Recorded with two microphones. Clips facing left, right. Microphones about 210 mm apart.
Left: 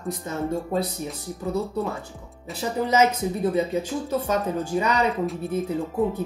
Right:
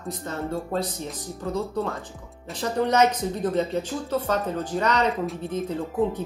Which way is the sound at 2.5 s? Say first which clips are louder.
Right 1 dB; 5° left (ahead or behind).